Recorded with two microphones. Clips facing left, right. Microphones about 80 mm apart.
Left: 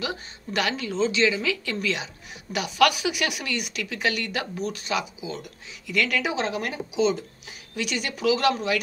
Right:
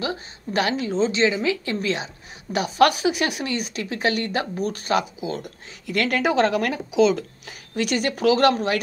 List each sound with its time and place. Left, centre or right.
0.0 s speech: right
7.4 s speech: right